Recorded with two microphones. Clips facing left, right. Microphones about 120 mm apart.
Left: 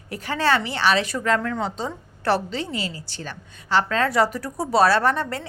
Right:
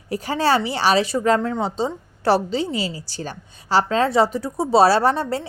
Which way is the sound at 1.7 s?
35° right (ahead or behind).